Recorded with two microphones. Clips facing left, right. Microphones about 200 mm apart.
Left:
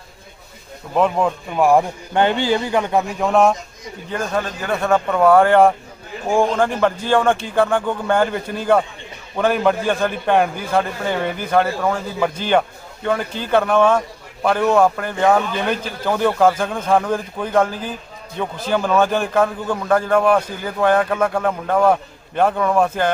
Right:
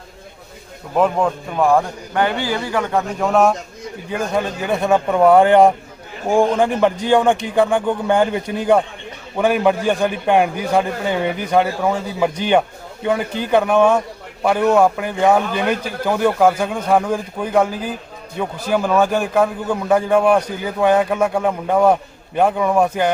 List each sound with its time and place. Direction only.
0.9 s a man's voice: centre (ahead or behind)
2.1 s a man's voice: 20° left (ahead or behind)
3.2 s a man's voice: centre (ahead or behind)
4.1 s a man's voice: 10° right (ahead or behind)